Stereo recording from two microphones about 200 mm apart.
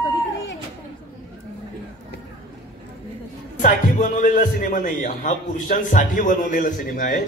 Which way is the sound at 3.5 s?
40° left (ahead or behind).